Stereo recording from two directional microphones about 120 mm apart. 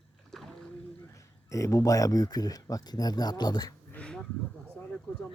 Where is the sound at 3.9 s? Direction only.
10° left (ahead or behind).